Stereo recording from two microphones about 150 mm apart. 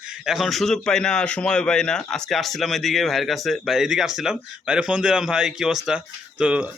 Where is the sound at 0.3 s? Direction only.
Centre (ahead or behind).